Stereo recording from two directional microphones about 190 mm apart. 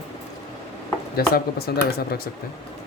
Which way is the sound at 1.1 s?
55° left (ahead or behind).